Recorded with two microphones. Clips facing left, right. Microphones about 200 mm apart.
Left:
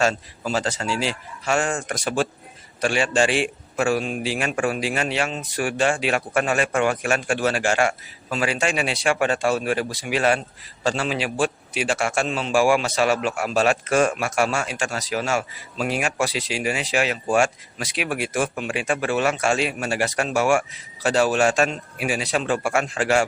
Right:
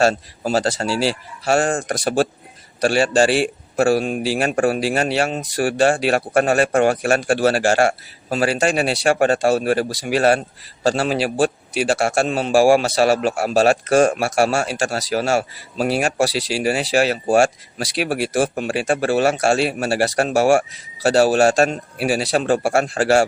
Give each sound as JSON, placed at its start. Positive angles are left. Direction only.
{"t": 0.0, "sound": "a man's voice", "side_deg": -35}
{"t": 2.8, "sound": "a man's voice", "side_deg": -35}